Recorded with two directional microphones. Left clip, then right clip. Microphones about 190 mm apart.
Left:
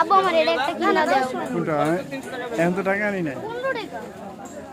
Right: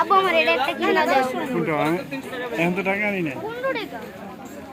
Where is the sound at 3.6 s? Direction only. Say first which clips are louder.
Right 1 dB; 10° right (ahead or behind).